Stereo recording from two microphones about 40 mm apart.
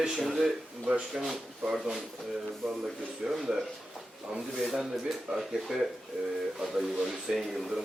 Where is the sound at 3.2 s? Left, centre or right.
Centre.